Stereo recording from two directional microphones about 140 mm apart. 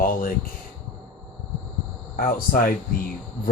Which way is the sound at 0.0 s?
90° left.